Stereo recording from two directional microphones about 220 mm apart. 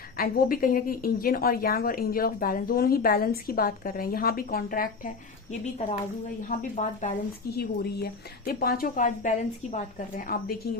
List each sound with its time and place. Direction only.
0.2 s a woman's voice: 40° left (ahead or behind)
7.5 s a woman's voice: 45° left (ahead or behind)